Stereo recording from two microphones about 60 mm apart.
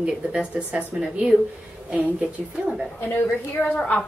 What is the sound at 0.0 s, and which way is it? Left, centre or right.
Speech, centre.